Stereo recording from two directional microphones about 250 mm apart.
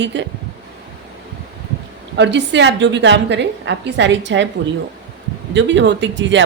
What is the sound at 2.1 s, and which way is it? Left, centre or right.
A woman's voice, right.